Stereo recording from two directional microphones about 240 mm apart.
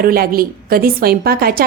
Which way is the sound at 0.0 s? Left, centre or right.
Right.